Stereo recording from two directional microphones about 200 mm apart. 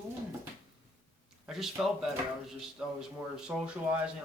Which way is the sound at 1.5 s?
Centre (ahead or behind).